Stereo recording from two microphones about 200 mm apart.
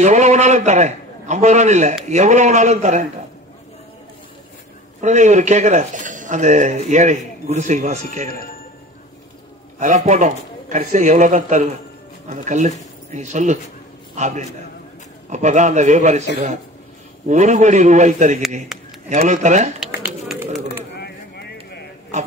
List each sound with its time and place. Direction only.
0.0 s a man's voice: 35° right (ahead or behind)
5.0 s speech: 35° right (ahead or behind)
9.8 s speech: 35° right (ahead or behind)
17.3 s speech: 35° right (ahead or behind)
18.7 s a sound: centre (ahead or behind)
19.0 s speech: 35° right (ahead or behind)
20.9 s a sound: 55° left (ahead or behind)